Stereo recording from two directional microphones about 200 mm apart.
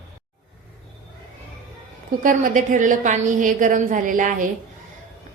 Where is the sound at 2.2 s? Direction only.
40° right (ahead or behind).